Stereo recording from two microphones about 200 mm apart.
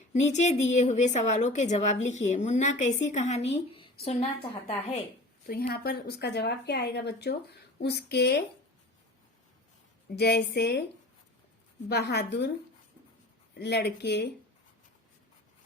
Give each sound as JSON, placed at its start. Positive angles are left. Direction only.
{"t": 0.1, "sound": "a woman's voice", "side_deg": 35}
{"t": 5.5, "sound": "speech", "side_deg": 50}
{"t": 10.2, "sound": "speech", "side_deg": 55}
{"t": 11.9, "sound": "speech", "side_deg": 55}
{"t": 13.5, "sound": "speech", "side_deg": 55}